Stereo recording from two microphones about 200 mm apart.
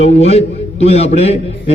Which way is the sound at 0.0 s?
30° left (ahead or behind).